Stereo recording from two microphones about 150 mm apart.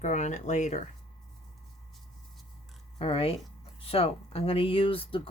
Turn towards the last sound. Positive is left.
turn(degrees=35)  # may be behind; listen again after turning